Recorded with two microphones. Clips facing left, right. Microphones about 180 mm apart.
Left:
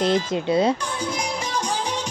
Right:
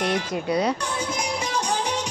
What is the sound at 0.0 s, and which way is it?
Speech, 25° left (ahead or behind).